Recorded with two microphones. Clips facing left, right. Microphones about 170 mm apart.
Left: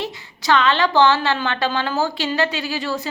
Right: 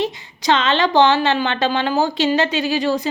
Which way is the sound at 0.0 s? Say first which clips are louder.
Right 5 dB; 20° right (ahead or behind).